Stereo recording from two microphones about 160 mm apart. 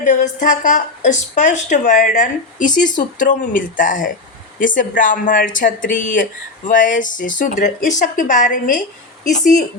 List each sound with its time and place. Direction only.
0.0 s a woman's voice: 50° left (ahead or behind)